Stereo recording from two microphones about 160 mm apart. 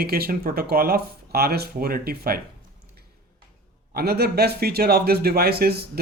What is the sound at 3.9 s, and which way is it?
Speech, 80° right.